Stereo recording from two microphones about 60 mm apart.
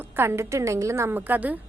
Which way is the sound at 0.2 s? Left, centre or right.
Right.